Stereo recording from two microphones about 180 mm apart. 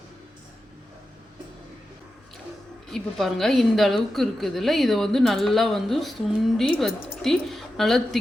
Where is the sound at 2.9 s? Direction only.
Centre (ahead or behind).